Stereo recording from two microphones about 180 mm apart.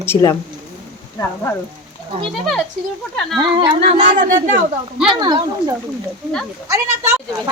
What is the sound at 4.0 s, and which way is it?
Speech, 45° right (ahead or behind).